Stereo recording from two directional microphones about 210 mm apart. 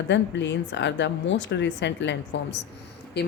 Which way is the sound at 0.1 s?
55° left (ahead or behind).